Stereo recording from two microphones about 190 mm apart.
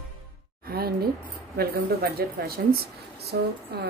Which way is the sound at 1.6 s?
55° right (ahead or behind).